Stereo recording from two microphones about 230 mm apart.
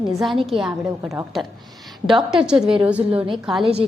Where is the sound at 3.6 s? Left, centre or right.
Right.